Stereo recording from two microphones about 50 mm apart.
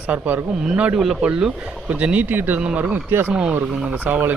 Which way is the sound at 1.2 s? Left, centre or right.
Centre.